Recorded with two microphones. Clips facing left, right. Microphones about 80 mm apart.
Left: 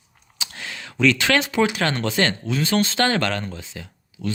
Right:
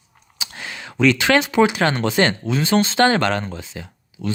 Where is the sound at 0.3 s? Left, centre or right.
Centre.